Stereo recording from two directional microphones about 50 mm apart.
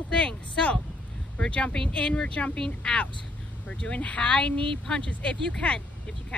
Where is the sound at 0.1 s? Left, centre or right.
Left.